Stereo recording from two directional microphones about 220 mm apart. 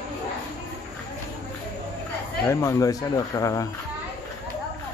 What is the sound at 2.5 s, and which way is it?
Speech, 15° left (ahead or behind).